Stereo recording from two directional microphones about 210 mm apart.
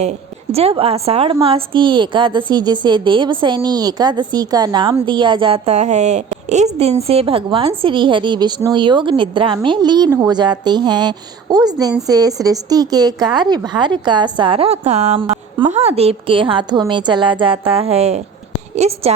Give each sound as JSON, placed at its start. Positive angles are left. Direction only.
{"t": 0.5, "sound": "a woman's voice", "side_deg": -25}